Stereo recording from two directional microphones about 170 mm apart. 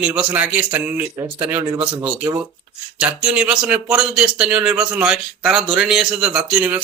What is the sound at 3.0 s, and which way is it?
A man's voice, 5° right (ahead or behind).